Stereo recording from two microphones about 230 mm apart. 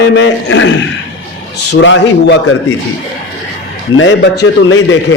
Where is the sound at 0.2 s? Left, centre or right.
Left.